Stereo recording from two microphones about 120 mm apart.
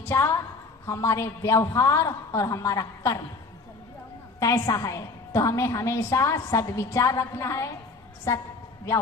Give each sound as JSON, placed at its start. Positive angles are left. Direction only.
{"t": 0.0, "sound": "a sound", "side_deg": 20}
{"t": 0.9, "sound": "a woman's voice", "side_deg": 25}
{"t": 4.4, "sound": "a woman's voice", "side_deg": 25}